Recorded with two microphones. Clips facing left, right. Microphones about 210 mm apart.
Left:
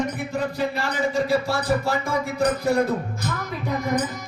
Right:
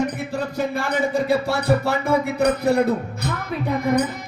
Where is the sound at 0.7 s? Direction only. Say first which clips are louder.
Right 2 dB; 60° right (ahead or behind).